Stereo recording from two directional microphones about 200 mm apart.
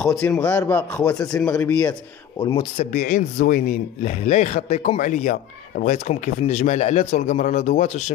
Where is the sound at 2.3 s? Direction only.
25° left (ahead or behind).